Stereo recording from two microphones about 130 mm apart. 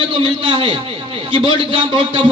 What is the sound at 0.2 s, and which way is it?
A man's voice, 40° right (ahead or behind).